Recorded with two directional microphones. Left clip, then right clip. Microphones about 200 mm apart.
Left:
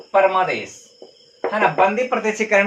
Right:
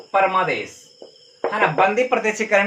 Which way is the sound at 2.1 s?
5° left (ahead or behind).